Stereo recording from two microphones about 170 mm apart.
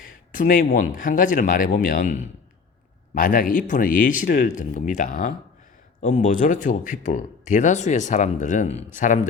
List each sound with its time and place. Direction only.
0.3 s speech: 55° left (ahead or behind)